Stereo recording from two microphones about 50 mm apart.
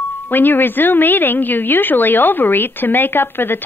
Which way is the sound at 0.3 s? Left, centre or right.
Left.